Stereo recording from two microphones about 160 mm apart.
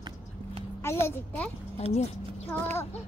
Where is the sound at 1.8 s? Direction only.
40° left (ahead or behind).